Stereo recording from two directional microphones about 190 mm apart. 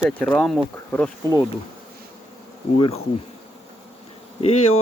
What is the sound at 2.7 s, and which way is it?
Bee, 30° left (ahead or behind).